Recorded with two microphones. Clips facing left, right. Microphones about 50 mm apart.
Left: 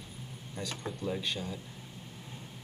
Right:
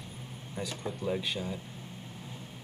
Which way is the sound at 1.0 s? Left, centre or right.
Centre.